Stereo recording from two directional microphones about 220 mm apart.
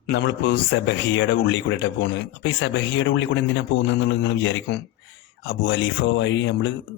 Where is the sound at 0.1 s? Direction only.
50° left (ahead or behind).